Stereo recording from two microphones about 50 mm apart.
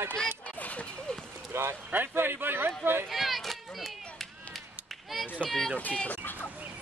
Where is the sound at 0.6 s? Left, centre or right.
Left.